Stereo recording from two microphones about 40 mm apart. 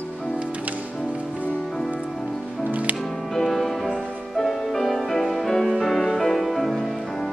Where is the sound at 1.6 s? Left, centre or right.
Centre.